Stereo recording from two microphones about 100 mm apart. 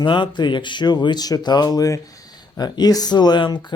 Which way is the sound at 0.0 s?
55° left (ahead or behind).